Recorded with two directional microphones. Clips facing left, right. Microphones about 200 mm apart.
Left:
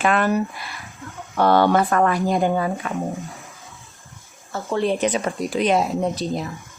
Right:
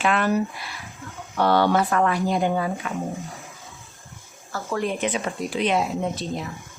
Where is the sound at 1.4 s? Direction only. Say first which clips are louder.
Left 3 dB; 50° left (ahead or behind).